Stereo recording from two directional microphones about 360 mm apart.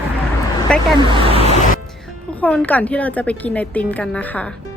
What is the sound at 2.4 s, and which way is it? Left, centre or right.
Speech, centre.